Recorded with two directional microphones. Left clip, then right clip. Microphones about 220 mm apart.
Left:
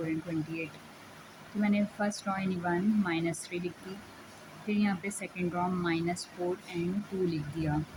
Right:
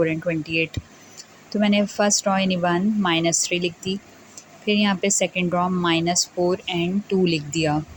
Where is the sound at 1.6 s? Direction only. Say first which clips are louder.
Right 12 dB; 30° right (ahead or behind).